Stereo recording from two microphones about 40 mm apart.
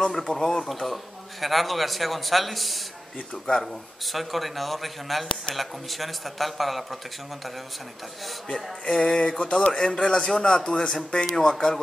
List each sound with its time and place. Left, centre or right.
0.0 s speech: centre
4.0 s speech: centre
8.5 s speech: centre
10.6 s speech: left